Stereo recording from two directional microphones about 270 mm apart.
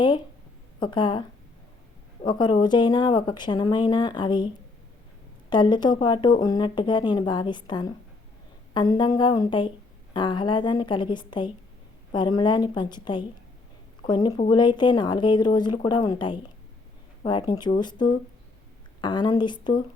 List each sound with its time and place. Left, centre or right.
0.8 s speech: centre
2.2 s speech: centre
5.5 s speech: centre